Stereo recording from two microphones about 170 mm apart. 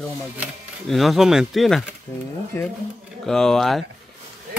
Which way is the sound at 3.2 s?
5° left (ahead or behind).